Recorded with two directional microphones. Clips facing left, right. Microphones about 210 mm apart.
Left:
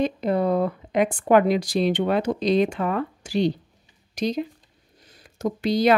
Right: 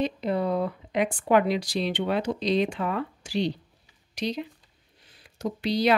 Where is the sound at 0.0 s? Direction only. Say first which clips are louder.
Left 4 dB; 50° left (ahead or behind).